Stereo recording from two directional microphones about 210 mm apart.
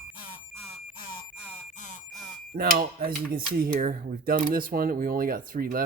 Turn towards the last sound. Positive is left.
turn(degrees=-45)  # may be behind; listen again after turning